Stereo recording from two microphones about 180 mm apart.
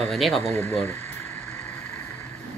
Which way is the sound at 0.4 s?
15° left (ahead or behind).